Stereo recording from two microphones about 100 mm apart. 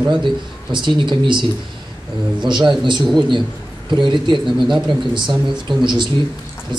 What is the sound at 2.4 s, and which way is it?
Speech, 50° right (ahead or behind).